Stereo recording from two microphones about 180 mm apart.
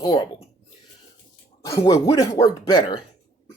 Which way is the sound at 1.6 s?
20° left (ahead or behind).